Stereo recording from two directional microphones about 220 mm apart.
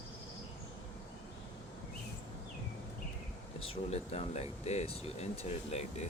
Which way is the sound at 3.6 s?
25° left (ahead or behind).